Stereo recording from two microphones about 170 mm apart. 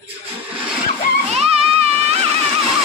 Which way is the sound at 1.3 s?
35° right (ahead or behind).